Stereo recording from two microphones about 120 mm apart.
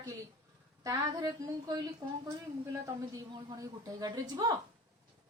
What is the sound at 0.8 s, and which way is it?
A woman's voice, 30° right (ahead or behind).